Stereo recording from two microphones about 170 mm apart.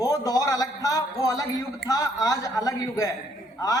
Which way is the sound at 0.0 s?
20° left (ahead or behind).